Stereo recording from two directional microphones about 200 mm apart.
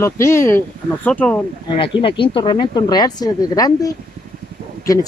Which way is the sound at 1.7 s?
25° left (ahead or behind).